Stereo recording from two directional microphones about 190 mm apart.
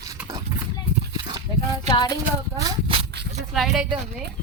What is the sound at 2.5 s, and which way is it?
Walk, 25° right (ahead or behind).